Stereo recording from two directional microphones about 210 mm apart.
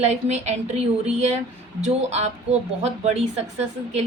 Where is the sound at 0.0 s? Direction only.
30° right (ahead or behind).